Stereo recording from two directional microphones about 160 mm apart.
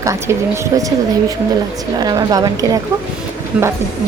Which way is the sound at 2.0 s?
25° right (ahead or behind).